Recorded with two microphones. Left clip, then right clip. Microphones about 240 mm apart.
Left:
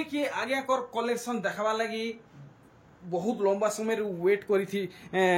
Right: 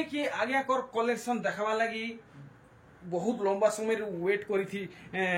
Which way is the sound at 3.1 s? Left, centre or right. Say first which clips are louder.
Left 2 dB; centre.